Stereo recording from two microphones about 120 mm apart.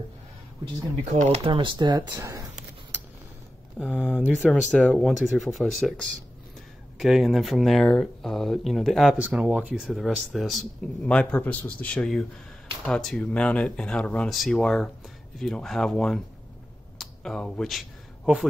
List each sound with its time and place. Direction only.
1.0 s speech: 70° right (ahead or behind)
1.5 s speech: 40° right (ahead or behind)
4.4 s speech: centre (ahead or behind)
7.0 s speech: 5° right (ahead or behind)
9.2 s speech: 10° right (ahead or behind); by 16.2 s 5° left (ahead or behind)
17.0 s a sound: 5° left (ahead or behind)